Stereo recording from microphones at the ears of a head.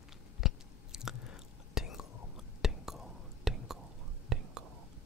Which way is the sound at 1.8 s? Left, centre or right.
Left.